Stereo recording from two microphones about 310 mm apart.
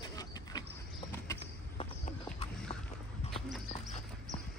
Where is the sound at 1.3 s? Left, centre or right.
Centre.